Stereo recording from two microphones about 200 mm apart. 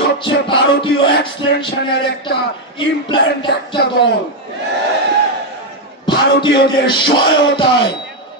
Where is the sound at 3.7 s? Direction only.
60° left (ahead or behind).